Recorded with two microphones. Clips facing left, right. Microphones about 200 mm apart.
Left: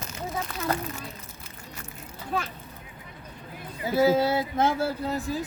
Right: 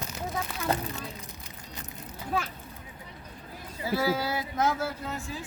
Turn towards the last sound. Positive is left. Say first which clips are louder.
# left 7 dB
turn(degrees=35)  # may be behind; listen again after turning